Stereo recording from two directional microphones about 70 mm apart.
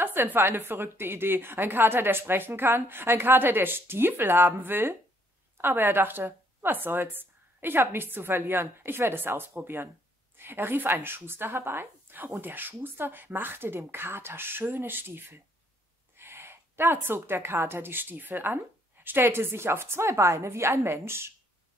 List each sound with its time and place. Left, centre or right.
0.0 s a woman's voice: right